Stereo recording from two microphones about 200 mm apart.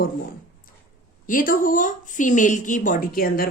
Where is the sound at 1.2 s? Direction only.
45° left (ahead or behind).